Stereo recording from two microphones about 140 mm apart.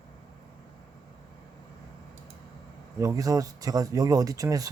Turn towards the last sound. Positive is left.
turn(degrees=-25)  # may be behind; listen again after turning